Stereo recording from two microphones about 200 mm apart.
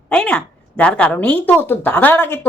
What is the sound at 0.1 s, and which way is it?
A woman's voice, 5° left (ahead or behind).